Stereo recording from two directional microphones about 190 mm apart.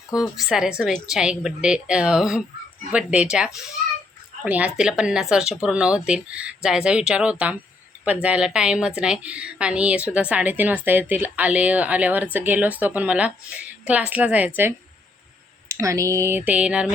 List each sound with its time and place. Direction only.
0.1 s a woman's voice: centre (ahead or behind)
15.7 s a woman's voice: 15° right (ahead or behind)